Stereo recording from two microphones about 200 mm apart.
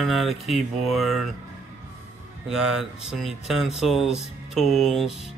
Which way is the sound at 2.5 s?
Centre (ahead or behind).